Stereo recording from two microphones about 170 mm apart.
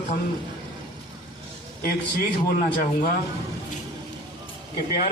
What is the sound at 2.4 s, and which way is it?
Speech, 55° left (ahead or behind).